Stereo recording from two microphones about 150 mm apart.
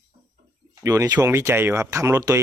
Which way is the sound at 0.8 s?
25° right (ahead or behind).